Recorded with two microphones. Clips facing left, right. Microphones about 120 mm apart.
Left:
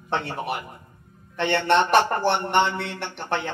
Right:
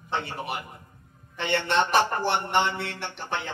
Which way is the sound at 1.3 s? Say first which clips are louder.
Left 4 dB; 60° left (ahead or behind).